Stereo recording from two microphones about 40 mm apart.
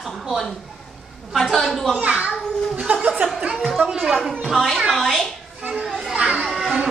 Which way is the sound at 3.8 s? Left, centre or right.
Centre.